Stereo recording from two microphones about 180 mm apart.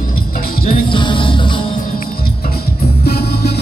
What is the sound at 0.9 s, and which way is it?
Music, 25° left (ahead or behind).